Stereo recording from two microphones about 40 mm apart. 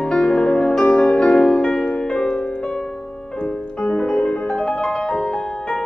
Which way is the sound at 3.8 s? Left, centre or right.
Centre.